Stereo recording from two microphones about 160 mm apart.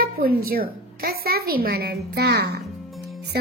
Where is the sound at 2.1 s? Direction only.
90° right.